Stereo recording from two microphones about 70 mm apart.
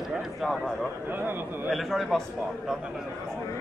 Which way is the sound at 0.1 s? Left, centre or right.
Centre.